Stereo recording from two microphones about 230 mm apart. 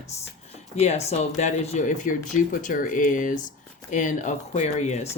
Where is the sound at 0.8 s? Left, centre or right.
Left.